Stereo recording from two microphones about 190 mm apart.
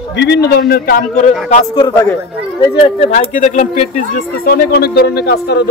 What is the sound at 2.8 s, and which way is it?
Speech, 35° left (ahead or behind).